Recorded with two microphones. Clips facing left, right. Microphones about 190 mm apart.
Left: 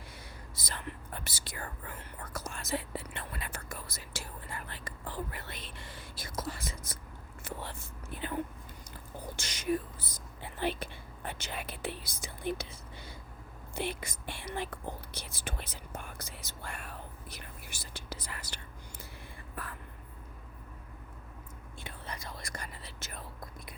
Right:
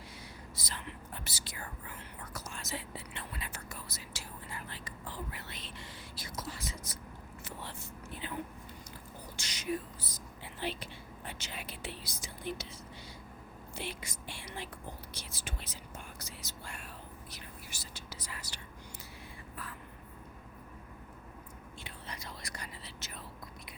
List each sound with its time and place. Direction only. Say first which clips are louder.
0.5 s whispering: left 4 dB; 50° left (ahead or behind)
9.3 s whispering: left 4 dB; 50° left (ahead or behind)
13.7 s whispering: left 6 dB; 55° left (ahead or behind)
21.8 s whispering: left 4 dB; 50° left (ahead or behind)